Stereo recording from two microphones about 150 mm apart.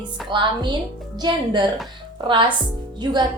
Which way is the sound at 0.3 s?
30° right (ahead or behind).